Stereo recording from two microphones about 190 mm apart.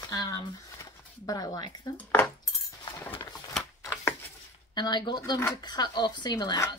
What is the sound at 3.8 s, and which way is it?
Shuffling cards, 10° left (ahead or behind).